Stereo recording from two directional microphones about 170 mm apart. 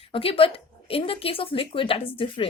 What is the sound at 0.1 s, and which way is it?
Speech, 35° left (ahead or behind).